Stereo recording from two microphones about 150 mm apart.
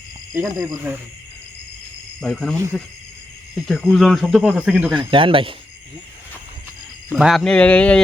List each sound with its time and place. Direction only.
0.3 s speech: 20° right (ahead or behind)
2.2 s speech: 5° left (ahead or behind)
4.9 s speech: 35° right (ahead or behind)
7.1 s speech: centre (ahead or behind)